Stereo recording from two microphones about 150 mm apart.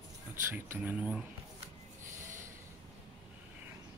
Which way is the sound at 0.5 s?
10° right (ahead or behind).